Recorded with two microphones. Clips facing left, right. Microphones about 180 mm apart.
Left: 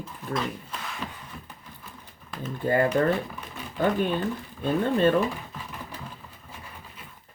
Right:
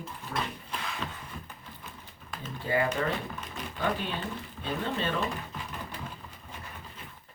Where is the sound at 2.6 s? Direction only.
50° left (ahead or behind).